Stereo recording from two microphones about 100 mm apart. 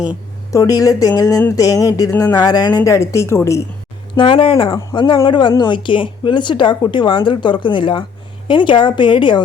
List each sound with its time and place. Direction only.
0.5 s speech: 35° left (ahead or behind)
4.1 s a woman's voice: 55° left (ahead or behind)